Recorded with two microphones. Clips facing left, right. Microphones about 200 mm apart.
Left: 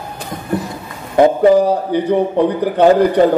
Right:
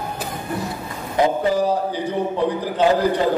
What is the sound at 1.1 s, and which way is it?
A man's voice, 60° left (ahead or behind).